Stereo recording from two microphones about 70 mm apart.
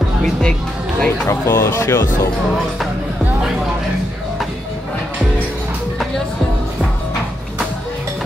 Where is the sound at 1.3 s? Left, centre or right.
Left.